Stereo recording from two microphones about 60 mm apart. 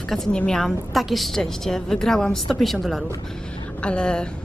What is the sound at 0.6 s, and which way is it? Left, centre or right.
A woman's voice, centre.